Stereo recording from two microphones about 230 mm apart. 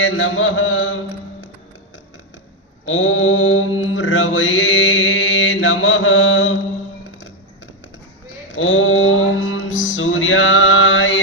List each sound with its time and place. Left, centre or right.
0.0 s mantra: left
2.8 s mantra: left
8.5 s mantra: left